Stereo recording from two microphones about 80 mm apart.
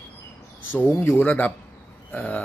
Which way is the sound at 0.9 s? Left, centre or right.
Left.